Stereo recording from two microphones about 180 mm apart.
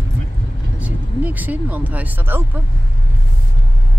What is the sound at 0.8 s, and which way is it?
Speech, 10° right (ahead or behind).